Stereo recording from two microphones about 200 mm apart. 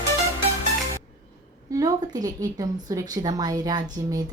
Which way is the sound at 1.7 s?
20° right (ahead or behind).